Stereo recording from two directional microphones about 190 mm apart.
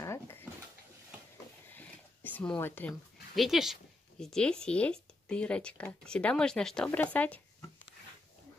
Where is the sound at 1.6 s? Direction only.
10° left (ahead or behind).